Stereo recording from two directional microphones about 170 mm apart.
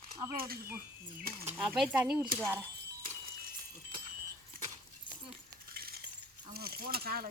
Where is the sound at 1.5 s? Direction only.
5° right (ahead or behind).